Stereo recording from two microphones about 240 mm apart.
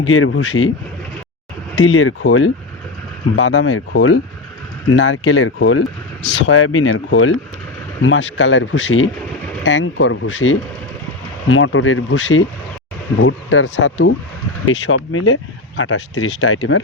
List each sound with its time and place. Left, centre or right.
0.0 s speech: left
1.8 s speech: left